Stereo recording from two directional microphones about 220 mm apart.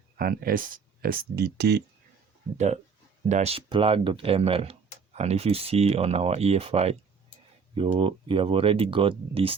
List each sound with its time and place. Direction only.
0.2 s speech: 40° right (ahead or behind)
3.2 s speech: 30° right (ahead or behind)